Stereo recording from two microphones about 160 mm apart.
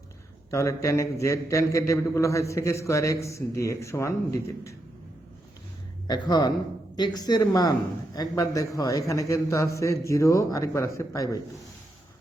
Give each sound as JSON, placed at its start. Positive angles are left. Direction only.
{"t": 0.5, "sound": "a man's voice", "side_deg": 20}
{"t": 6.1, "sound": "a man's voice", "side_deg": 25}